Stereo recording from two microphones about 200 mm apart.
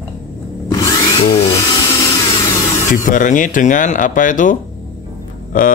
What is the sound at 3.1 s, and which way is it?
Speech, 40° left (ahead or behind).